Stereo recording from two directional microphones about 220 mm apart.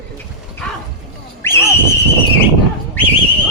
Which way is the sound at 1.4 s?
10° left (ahead or behind).